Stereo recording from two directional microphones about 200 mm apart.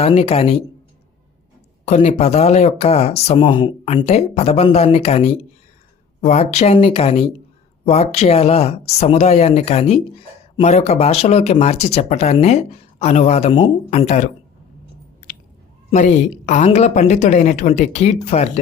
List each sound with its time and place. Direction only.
0.0 s speech: 30° left (ahead or behind)
1.8 s speech: 35° left (ahead or behind)
15.9 s speech: 40° left (ahead or behind)